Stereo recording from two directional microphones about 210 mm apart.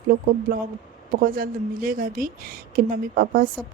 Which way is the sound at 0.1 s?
45° right (ahead or behind).